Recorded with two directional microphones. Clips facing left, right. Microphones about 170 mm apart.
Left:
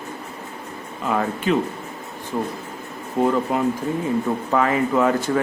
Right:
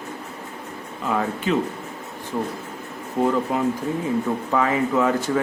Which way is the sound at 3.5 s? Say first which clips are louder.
Left 1 dB; 55° left (ahead or behind).